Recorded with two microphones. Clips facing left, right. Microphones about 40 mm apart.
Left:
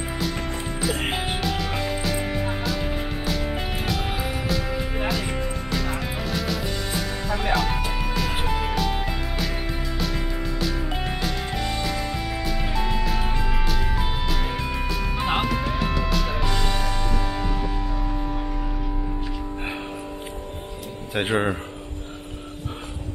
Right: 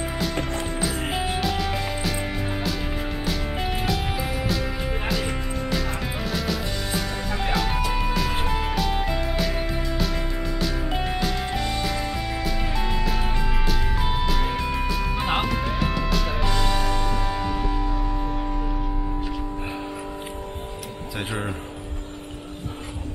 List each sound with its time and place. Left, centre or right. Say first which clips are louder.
0.5 s music: even; centre
1.0 s music: even; left
1.4 s music: right 1 dB; centre
21.1 s speech: left 7 dB; left